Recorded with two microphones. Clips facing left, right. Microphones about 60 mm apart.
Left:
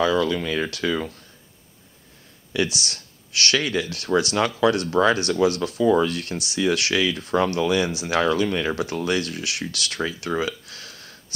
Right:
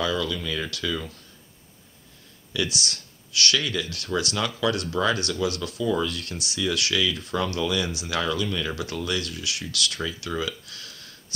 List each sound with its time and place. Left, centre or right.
0.0 s speech: left
2.5 s speech: left